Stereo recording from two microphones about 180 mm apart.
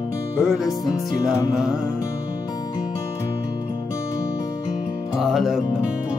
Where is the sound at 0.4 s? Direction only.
Centre (ahead or behind).